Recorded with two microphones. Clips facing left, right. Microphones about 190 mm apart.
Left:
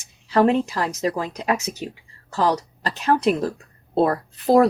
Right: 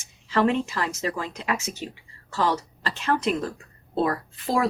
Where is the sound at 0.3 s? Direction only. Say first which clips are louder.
Left 5 dB; 40° left (ahead or behind).